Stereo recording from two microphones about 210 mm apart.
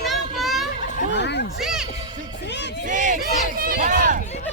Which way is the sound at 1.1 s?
55° left (ahead or behind).